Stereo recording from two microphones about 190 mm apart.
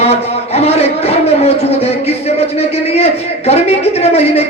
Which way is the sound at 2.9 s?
35° left (ahead or behind).